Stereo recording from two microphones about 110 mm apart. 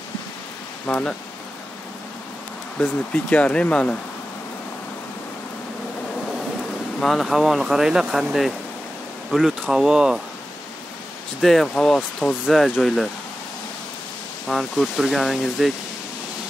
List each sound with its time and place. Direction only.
0.8 s speech: 10° left (ahead or behind)
2.8 s speech: 10° left (ahead or behind)
7.0 s speech: centre (ahead or behind)
11.4 s speech: 5° left (ahead or behind)
14.5 s speech: centre (ahead or behind)